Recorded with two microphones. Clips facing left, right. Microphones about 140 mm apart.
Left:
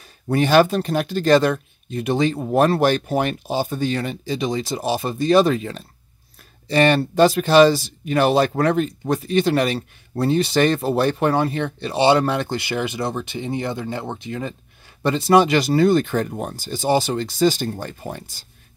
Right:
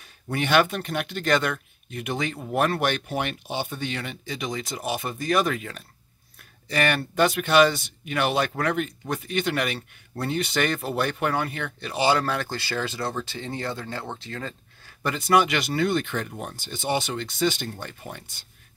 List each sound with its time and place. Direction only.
0.3 s speech: 35° left (ahead or behind); by 14.5 s 15° left (ahead or behind)
15.0 s speech: 30° left (ahead or behind)